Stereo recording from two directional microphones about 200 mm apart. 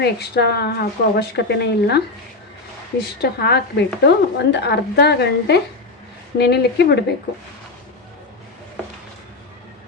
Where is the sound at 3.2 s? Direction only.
50° left (ahead or behind).